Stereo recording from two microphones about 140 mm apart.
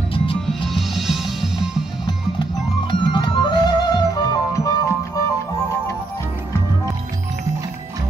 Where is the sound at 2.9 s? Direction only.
35° left (ahead or behind).